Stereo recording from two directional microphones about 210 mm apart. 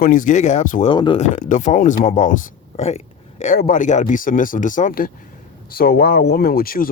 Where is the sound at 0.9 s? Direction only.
25° left (ahead or behind).